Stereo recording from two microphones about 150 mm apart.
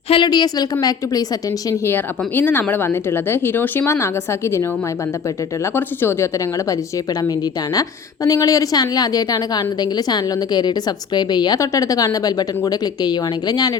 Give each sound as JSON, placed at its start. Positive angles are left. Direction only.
{"t": 0.1, "sound": "a woman's voice", "side_deg": 30}
{"t": 1.8, "sound": "speech", "side_deg": 15}
{"t": 5.7, "sound": "a woman's voice", "side_deg": 15}